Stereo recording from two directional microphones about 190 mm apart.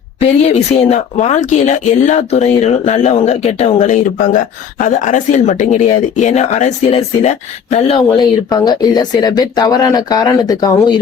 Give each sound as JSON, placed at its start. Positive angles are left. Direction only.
{"t": 0.2, "sound": "speech", "side_deg": 35}
{"t": 8.1, "sound": "speech", "side_deg": 20}